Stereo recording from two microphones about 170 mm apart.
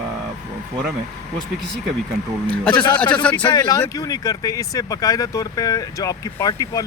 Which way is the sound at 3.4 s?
20° left (ahead or behind).